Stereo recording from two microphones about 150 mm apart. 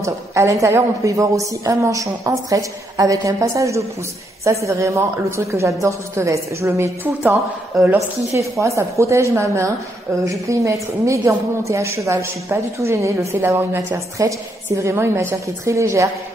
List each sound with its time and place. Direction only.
0.0 s a woman's voice: 20° right (ahead or behind)